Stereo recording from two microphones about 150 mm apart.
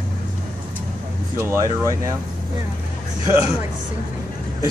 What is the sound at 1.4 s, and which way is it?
Speech, 15° right (ahead or behind).